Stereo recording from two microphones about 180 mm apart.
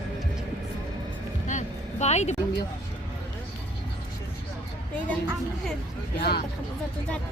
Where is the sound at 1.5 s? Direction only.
40° left (ahead or behind).